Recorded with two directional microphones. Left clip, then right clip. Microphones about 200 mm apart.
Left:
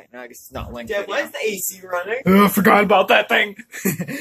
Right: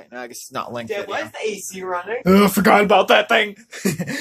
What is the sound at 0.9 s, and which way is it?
Speech, 20° left (ahead or behind).